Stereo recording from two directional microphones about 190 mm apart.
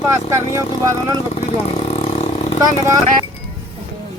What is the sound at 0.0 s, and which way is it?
Speech, 15° right (ahead or behind).